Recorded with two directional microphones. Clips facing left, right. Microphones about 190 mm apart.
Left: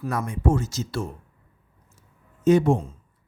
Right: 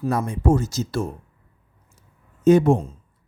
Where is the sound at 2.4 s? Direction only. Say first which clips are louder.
Right 3 dB; 50° right (ahead or behind).